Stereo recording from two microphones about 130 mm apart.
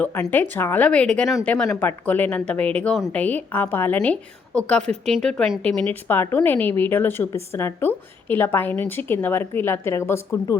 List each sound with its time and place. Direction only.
0.0 s a woman's voice: 15° left (ahead or behind)